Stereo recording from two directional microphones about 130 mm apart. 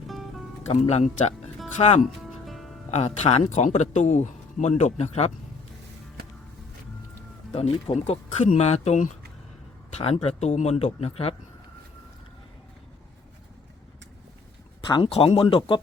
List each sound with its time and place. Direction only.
0.7 s speech: 55° left (ahead or behind)
2.2 s music: centre (ahead or behind)
2.9 s speech: 55° left (ahead or behind)
7.5 s speech: 55° left (ahead or behind)
10.0 s speech: 50° left (ahead or behind)
14.8 s speech: 35° left (ahead or behind)
15.1 s speech: 50° left (ahead or behind)